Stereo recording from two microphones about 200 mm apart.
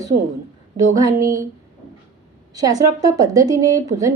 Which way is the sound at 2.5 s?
20° right (ahead or behind).